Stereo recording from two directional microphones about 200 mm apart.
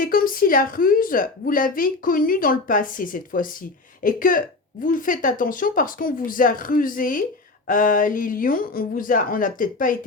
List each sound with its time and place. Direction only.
0.0 s a woman's voice: 45° left (ahead or behind)